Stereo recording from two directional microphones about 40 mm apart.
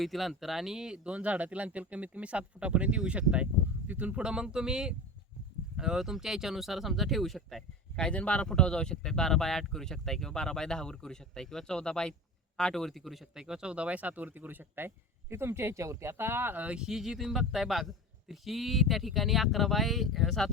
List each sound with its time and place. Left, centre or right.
0.0 s speech: centre; by 4.2 s right
4.2 s speech: right; by 7.6 s centre
8.1 s speech: left; by 13.2 s centre
13.3 s speech: centre; by 16.6 s right
16.8 s a man's voice: centre